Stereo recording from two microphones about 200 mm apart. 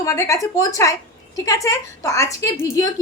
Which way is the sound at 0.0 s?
15° left (ahead or behind).